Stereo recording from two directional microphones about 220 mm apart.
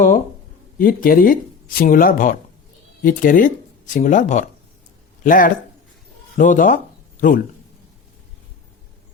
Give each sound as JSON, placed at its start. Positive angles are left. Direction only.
{"t": 0.8, "sound": "speech", "side_deg": 40}